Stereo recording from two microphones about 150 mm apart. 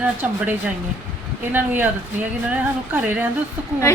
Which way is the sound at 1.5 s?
15° right (ahead or behind).